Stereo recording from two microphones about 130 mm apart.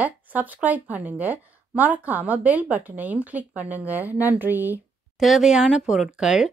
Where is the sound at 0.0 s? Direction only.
15° right (ahead or behind).